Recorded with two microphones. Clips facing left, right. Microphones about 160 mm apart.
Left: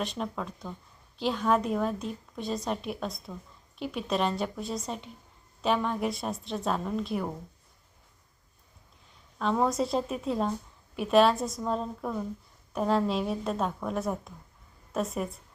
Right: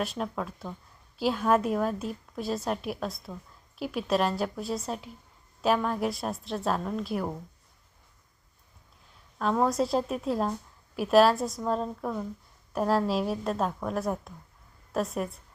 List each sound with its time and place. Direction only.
0.0 s a woman's voice: 5° right (ahead or behind)
9.4 s a woman's voice: centre (ahead or behind)